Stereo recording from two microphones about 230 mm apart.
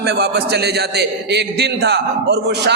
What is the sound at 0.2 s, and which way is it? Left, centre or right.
A man's voice, right.